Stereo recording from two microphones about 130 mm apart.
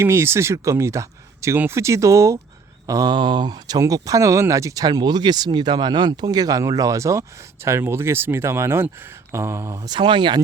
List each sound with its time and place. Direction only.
0.0 s speech: 20° right (ahead or behind)
9.9 s speech: 35° right (ahead or behind)